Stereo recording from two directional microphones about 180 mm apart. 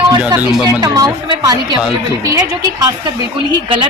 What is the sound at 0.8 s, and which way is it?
Speech, 25° right (ahead or behind).